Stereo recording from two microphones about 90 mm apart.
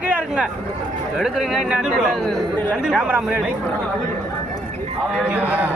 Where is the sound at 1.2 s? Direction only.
Centre (ahead or behind).